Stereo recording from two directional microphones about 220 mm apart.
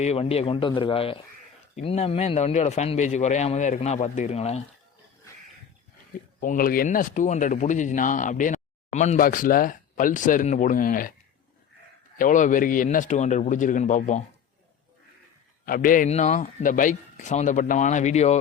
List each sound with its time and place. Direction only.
0.0 s a man's voice: 30° left (ahead or behind)
6.4 s speech: 40° left (ahead or behind)
12.1 s speech: 35° left (ahead or behind)
15.6 s speech: 40° left (ahead or behind)